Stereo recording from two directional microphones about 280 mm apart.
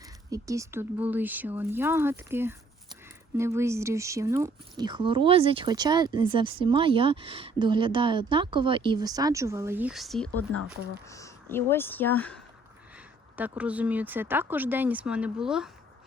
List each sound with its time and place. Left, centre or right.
0.3 s speech: centre
13.3 s speech: centre